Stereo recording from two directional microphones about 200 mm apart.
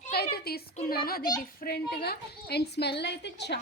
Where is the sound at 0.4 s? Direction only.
50° left (ahead or behind).